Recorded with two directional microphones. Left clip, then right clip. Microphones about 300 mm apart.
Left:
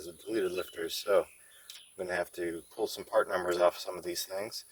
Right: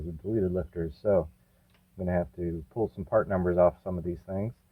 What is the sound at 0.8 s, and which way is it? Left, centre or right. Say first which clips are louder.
Speech: right 2 dB; centre.